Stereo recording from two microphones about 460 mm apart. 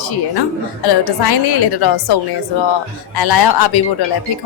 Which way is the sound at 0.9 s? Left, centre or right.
Left.